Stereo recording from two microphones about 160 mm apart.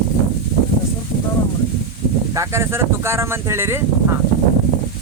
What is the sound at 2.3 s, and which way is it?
Speech, 20° right (ahead or behind).